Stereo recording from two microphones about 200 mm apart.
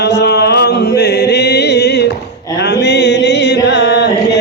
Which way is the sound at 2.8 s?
60° left (ahead or behind).